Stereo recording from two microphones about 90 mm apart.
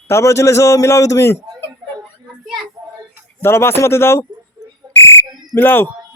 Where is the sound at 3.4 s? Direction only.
25° left (ahead or behind).